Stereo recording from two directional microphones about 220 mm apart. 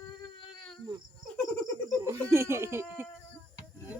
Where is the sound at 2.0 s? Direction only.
10° right (ahead or behind).